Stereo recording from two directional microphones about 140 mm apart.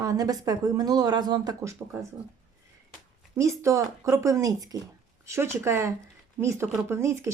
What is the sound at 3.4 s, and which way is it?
Speech, 20° right (ahead or behind).